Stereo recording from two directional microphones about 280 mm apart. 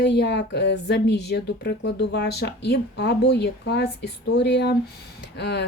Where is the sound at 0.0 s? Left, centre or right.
Left.